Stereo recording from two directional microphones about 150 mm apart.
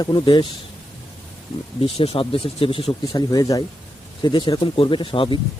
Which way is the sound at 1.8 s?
40° left (ahead or behind).